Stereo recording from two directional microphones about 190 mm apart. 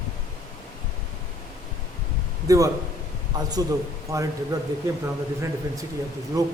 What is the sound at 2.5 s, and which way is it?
Speech, 20° right (ahead or behind).